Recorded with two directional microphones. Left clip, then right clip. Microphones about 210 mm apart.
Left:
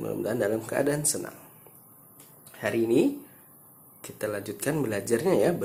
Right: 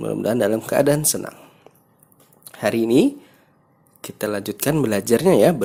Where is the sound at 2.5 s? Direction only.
50° right (ahead or behind).